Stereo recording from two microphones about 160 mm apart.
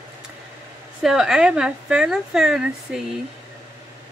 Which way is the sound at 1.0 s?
5° right (ahead or behind).